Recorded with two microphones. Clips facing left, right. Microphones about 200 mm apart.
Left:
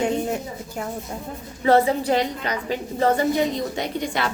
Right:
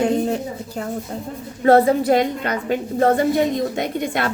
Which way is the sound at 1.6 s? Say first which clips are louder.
Right 4 dB; 45° right (ahead or behind).